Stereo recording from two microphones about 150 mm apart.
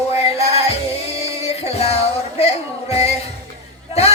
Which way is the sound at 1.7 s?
45° left (ahead or behind).